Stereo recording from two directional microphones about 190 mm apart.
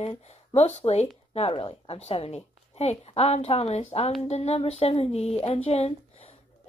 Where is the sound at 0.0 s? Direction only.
30° left (ahead or behind).